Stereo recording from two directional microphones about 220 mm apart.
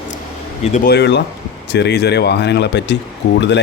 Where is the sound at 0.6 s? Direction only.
30° left (ahead or behind).